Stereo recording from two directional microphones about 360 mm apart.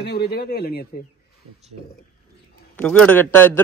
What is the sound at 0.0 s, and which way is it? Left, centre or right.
Speech, left.